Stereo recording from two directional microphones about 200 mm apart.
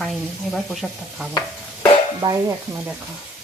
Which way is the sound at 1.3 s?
20° left (ahead or behind).